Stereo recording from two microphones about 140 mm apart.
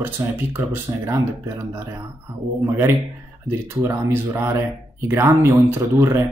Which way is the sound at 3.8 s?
20° right (ahead or behind).